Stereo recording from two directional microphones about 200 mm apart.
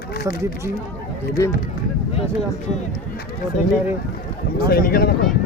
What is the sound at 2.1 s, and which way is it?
Speech, 30° left (ahead or behind).